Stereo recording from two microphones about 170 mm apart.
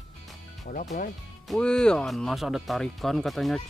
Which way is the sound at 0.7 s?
55° left (ahead or behind).